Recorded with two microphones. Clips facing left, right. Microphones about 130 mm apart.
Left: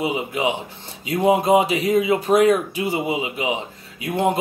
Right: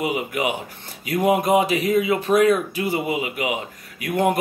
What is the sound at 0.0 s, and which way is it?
A man's voice, 25° left (ahead or behind).